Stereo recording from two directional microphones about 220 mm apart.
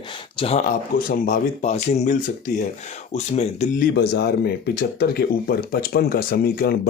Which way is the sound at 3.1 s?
30° left (ahead or behind).